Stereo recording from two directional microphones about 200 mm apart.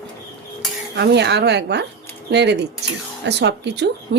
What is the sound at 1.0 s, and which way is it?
Speech, 60° right (ahead or behind).